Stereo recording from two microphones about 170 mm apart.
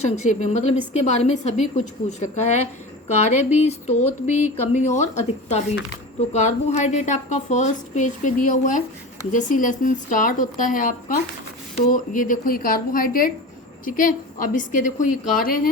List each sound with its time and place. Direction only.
0.0 s a woman's voice: 45° left (ahead or behind)